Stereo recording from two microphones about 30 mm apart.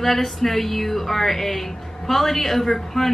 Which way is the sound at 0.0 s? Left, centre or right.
Centre.